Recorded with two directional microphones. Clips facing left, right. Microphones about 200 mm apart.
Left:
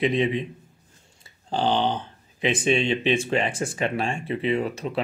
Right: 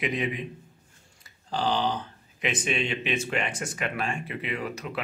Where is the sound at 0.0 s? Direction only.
25° left (ahead or behind).